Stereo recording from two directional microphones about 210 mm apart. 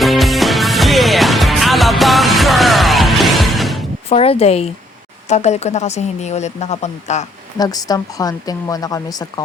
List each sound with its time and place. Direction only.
0.0 s music: centre (ahead or behind)
4.1 s a woman's voice: 30° left (ahead or behind)
7.6 s speech: 15° left (ahead or behind)